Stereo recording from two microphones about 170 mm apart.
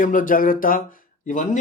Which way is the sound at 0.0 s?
50° left (ahead or behind).